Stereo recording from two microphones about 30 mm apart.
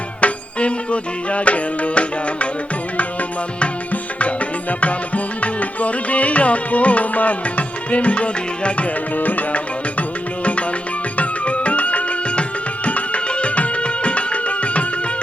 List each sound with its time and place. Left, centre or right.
0.2 s music: left
4.8 s music: left
9.1 s music: left
11.2 s music: left